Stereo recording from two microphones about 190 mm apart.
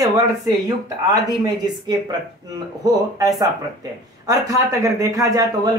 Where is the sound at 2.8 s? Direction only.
20° right (ahead or behind).